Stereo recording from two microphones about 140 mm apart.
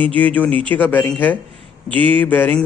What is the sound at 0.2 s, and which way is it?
A man's voice, 10° left (ahead or behind).